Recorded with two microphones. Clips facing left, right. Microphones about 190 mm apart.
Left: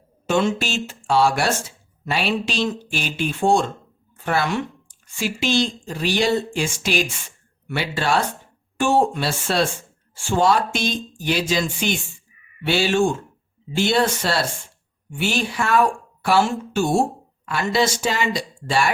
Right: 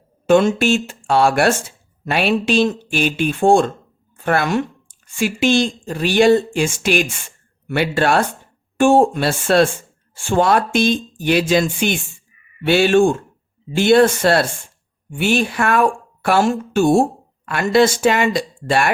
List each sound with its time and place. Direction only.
0.3 s speech: 55° right (ahead or behind)